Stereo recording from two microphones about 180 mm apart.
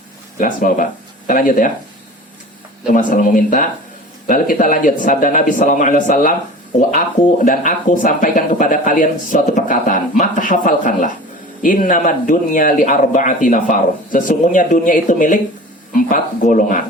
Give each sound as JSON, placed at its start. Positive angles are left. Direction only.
{"t": 0.3, "sound": "a man's voice", "side_deg": 45}
{"t": 2.8, "sound": "a man's voice", "side_deg": 45}
{"t": 7.4, "sound": "a man's voice", "side_deg": 45}